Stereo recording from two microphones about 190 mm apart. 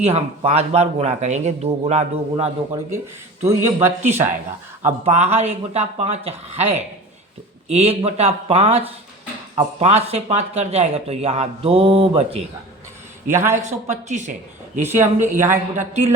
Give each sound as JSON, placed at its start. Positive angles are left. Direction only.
{"t": 0.0, "sound": "speech", "side_deg": -35}
{"t": 3.4, "sound": "speech", "side_deg": -15}
{"t": 4.0, "sound": "speech", "side_deg": -35}
{"t": 13.2, "sound": "speech", "side_deg": -10}
{"t": 13.6, "sound": "speech", "side_deg": -40}
{"t": 14.8, "sound": "speech", "side_deg": -10}
{"t": 15.8, "sound": "speech", "side_deg": -35}